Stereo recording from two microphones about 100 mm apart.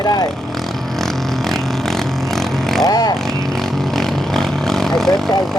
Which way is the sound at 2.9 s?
40° left (ahead or behind).